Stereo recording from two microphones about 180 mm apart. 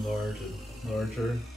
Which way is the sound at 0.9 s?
Centre (ahead or behind).